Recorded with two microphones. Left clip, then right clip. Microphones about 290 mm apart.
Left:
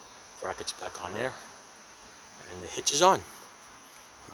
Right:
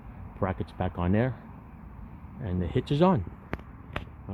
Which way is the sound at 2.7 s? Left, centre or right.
Centre.